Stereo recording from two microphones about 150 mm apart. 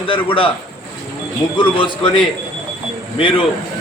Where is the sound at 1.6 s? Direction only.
35° left (ahead or behind).